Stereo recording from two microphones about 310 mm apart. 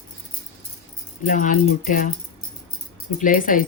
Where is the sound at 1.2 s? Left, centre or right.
Left.